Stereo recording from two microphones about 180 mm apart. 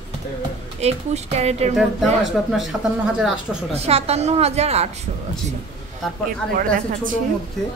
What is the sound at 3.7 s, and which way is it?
A woman's voice, 35° right (ahead or behind).